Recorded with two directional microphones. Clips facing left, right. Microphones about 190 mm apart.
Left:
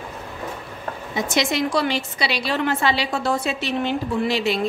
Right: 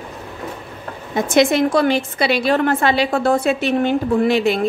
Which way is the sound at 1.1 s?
55° right (ahead or behind).